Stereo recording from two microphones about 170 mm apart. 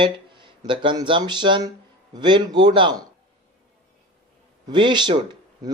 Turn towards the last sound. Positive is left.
turn(degrees=-25)  # may be behind; listen again after turning